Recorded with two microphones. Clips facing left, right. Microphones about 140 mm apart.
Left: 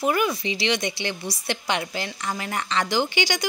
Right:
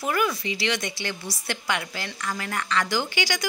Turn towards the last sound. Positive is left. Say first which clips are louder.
# left 3 dB
turn(degrees=20)  # may be behind; listen again after turning